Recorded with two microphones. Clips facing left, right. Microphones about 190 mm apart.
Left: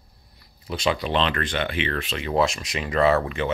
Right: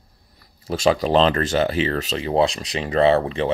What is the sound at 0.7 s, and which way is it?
Speech, 40° right (ahead or behind).